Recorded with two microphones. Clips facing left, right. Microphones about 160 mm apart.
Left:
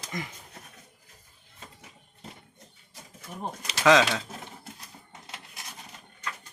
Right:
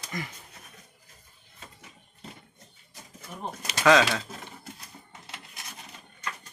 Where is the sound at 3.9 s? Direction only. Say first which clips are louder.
Even; 20° left (ahead or behind).